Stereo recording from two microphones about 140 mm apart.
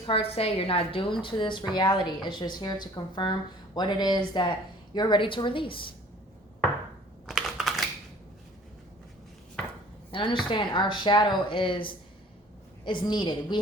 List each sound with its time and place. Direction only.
0.0 s a woman's voice: 45° left (ahead or behind)
7.3 s computer keyboard: centre (ahead or behind)
10.1 s a woman's voice: 35° left (ahead or behind)